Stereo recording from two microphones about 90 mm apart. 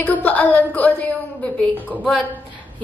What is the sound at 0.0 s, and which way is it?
A woman's voice, 20° left (ahead or behind).